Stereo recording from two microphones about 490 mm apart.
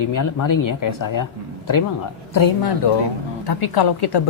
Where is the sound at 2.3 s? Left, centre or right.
Left.